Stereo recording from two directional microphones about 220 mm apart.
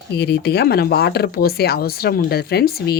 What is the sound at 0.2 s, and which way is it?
Speech, 45° left (ahead or behind).